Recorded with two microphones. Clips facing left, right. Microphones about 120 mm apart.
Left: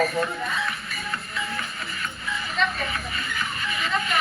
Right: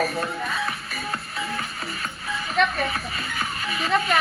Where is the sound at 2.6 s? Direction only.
65° right (ahead or behind).